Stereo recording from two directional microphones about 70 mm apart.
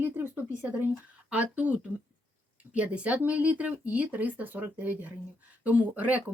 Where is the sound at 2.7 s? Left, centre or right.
Centre.